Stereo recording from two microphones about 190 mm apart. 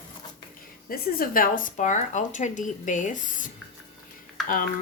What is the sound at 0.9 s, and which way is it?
Speech, 50° left (ahead or behind).